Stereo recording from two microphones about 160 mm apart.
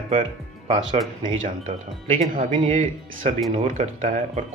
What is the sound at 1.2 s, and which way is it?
Speech, 50° right (ahead or behind).